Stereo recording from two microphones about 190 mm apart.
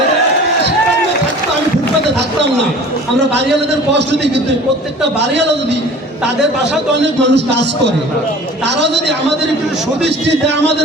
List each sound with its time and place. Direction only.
3.9 s a man's voice: 65° right (ahead or behind)
7.0 s a man's voice: 65° right (ahead or behind)